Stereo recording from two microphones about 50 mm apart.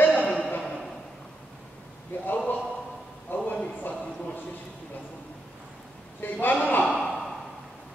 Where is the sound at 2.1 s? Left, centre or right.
Left.